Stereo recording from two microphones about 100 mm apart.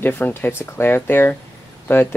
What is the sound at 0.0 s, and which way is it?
Speech, 20° left (ahead or behind).